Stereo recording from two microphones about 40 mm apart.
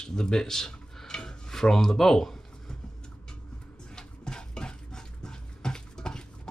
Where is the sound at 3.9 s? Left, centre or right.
Centre.